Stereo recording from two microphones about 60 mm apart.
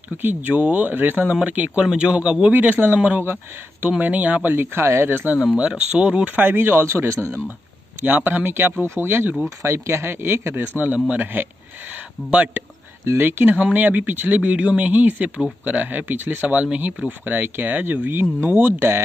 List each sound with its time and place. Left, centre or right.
0.2 s speech: right
2.5 s speech: right
5.6 s speech: centre; by 7.3 s right
8.0 s speech: right
9.4 s speech: right
11.1 s speech: right
13.2 s speech: right